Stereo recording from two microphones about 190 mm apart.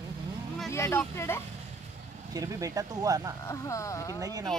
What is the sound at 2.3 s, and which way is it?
Speech, 20° right (ahead or behind).